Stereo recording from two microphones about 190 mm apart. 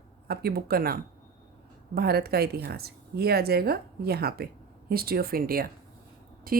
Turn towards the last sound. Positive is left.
turn(degrees=-50)  # may be behind; listen again after turning